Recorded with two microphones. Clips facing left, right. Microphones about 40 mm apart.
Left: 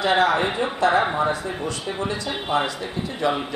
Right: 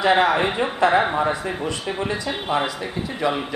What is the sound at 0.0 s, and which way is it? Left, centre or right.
A man's voice, right.